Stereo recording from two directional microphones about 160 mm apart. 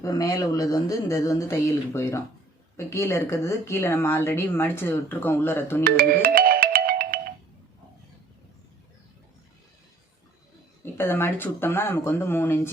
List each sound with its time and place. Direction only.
0.0 s speech: 20° left (ahead or behind)
5.8 s music: 65° right (ahead or behind)
10.9 s speech: 15° left (ahead or behind)